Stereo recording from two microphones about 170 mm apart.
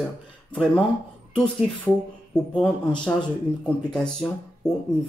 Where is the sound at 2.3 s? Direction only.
5° left (ahead or behind).